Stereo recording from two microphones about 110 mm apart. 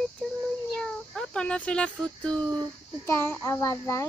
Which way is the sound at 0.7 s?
5° left (ahead or behind).